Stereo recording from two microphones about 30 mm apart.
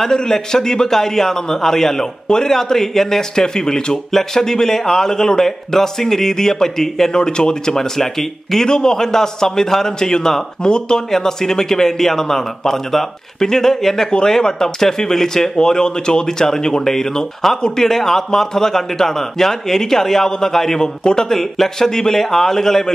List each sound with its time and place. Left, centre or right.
0.1 s a man's voice: left
2.2 s speech: left
2.5 s a man's voice: centre
4.1 s a man's voice: centre
7.2 s speech: left
7.7 s a man's voice: centre
8.6 s speech: left
11.1 s a man's voice: centre
21.3 s a man's voice: centre